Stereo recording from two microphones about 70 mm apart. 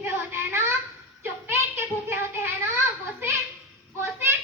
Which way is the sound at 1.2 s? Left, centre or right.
Right.